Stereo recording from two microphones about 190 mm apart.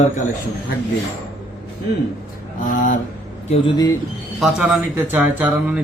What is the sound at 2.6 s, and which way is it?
Speech, 45° left (ahead or behind).